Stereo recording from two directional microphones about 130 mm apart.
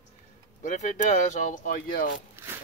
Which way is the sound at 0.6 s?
75° left (ahead or behind).